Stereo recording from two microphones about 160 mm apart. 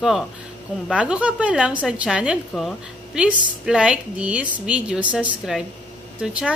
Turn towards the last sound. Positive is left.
turn(degrees=-5)  # may be behind; listen again after turning